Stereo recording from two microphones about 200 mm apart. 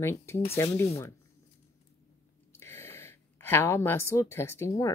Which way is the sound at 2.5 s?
15° left (ahead or behind).